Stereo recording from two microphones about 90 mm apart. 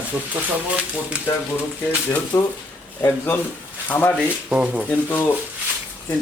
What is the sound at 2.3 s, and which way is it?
Speech, 35° left (ahead or behind).